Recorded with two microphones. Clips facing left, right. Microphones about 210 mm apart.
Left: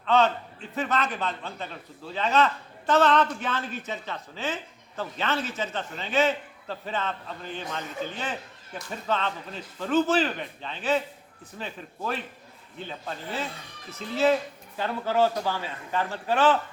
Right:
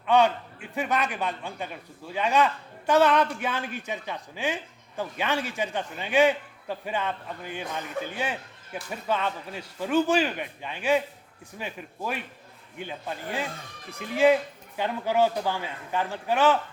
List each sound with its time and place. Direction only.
0.0 s a man's voice: 10° right (ahead or behind)